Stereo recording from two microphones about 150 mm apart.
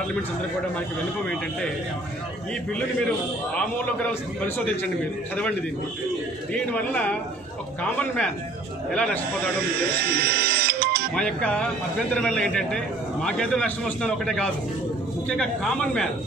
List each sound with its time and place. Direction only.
0.7 s speech: 5° left (ahead or behind)
3.5 s speech: 10° left (ahead or behind)
6.5 s speech: 10° left (ahead or behind)
10.1 s music: 90° right
11.1 s a man's voice: 5° left (ahead or behind)